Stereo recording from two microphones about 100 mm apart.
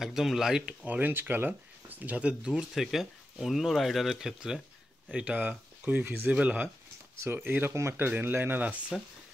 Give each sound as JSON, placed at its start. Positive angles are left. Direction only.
{"t": 0.0, "sound": "speech", "side_deg": -5}